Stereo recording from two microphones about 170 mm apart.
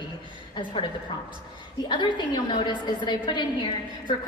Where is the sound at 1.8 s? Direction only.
25° left (ahead or behind).